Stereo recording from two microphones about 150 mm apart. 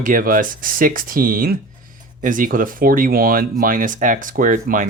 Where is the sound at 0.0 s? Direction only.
65° right (ahead or behind).